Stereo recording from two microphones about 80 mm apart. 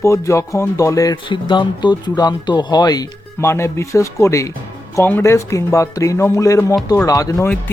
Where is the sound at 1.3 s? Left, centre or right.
Left.